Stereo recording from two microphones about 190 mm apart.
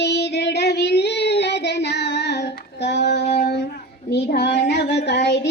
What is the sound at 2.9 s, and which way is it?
Female singing, 65° left (ahead or behind).